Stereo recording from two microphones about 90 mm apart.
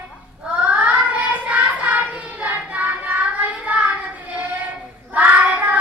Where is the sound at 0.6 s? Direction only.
15° right (ahead or behind).